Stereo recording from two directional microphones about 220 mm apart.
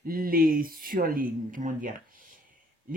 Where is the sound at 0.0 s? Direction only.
40° right (ahead or behind).